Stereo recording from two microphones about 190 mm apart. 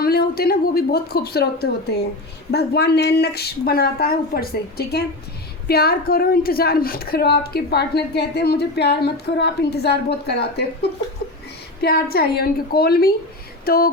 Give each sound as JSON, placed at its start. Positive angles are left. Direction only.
{"t": 0.0, "sound": "a woman's voice", "side_deg": 55}
{"t": 11.8, "sound": "a woman's voice", "side_deg": 50}